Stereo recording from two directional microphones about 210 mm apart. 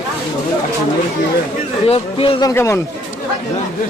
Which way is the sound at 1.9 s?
25° left (ahead or behind).